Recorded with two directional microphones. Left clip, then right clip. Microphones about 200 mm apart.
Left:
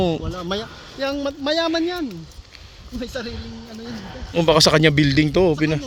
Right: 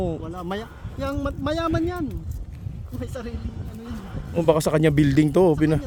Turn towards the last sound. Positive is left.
turn(degrees=-25)  # may be behind; listen again after turning